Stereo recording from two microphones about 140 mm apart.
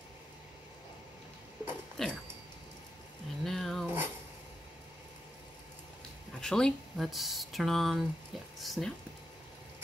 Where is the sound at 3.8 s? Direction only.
15° right (ahead or behind).